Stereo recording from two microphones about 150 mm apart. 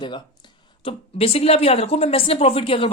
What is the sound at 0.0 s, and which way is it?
Speech, 30° left (ahead or behind).